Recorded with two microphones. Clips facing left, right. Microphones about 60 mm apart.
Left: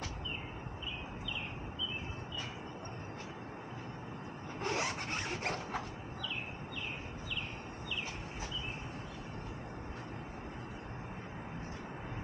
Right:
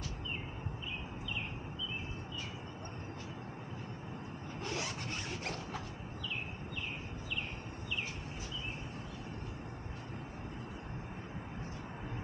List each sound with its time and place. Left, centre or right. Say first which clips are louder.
4.6 s zipper: left 5 dB; left